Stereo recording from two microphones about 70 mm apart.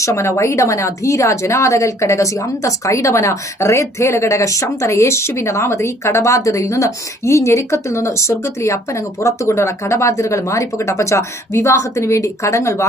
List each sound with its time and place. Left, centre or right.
0.0 s speech: left